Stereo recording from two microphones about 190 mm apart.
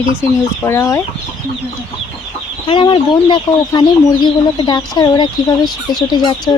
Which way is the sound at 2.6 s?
25° left (ahead or behind).